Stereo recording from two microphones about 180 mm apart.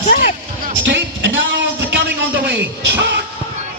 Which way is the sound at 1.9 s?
80° right.